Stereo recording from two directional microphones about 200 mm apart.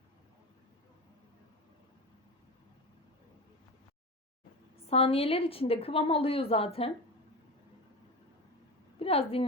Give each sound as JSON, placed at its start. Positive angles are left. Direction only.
{"t": 4.9, "sound": "a woman's voice", "side_deg": 30}
{"t": 9.0, "sound": "a woman's voice", "side_deg": 30}